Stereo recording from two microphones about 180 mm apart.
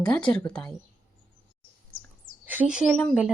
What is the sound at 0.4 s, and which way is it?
Speech, 5° left (ahead or behind).